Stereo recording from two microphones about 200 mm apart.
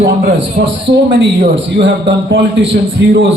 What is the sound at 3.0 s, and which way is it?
Speech, 60° right (ahead or behind).